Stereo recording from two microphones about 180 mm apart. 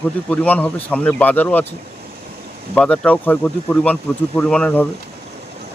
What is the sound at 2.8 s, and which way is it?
Speech, 5° left (ahead or behind).